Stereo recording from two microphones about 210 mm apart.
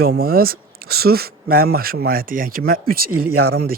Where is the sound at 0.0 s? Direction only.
45° right (ahead or behind).